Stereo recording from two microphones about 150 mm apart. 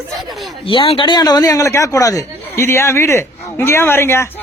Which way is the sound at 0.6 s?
40° left (ahead or behind).